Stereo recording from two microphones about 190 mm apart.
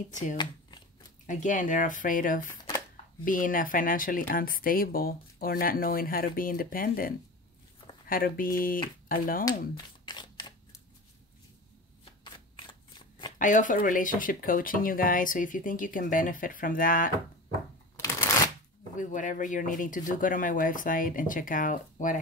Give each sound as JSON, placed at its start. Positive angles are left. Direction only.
{"t": 0.1, "sound": "speech", "side_deg": 40}
{"t": 13.4, "sound": "speech", "side_deg": 40}
{"t": 18.0, "sound": "shuffling cards", "side_deg": 15}
{"t": 18.9, "sound": "speech", "side_deg": 40}